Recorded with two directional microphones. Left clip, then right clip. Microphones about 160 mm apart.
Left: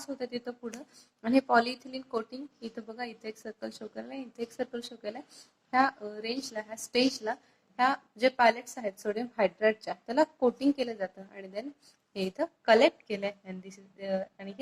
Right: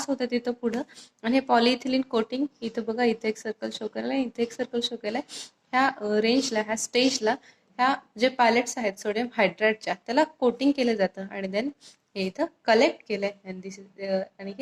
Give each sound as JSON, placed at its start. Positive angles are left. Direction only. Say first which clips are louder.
{"t": 0.0, "sound": "speech", "louder": "right 9 dB", "side_deg": -25}